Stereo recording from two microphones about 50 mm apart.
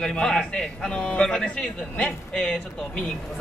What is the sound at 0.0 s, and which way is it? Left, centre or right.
A man's voice, centre.